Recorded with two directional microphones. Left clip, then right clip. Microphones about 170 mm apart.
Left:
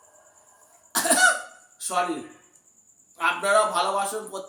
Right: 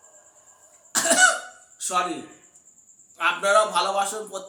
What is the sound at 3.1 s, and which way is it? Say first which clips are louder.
Speech: right 1 dB; 15° right (ahead or behind).